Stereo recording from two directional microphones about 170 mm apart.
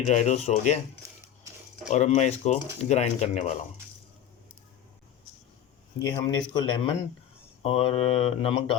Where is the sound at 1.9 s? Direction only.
40° left (ahead or behind).